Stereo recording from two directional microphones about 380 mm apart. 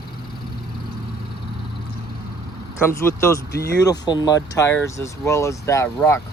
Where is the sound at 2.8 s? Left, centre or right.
Centre.